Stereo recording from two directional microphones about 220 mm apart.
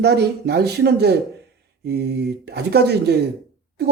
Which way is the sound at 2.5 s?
50° right (ahead or behind).